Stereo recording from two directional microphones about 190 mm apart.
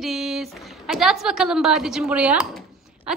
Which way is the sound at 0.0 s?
Centre (ahead or behind).